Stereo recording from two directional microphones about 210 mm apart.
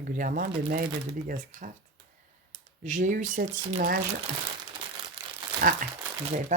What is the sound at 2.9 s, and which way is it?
Speech, 40° right (ahead or behind).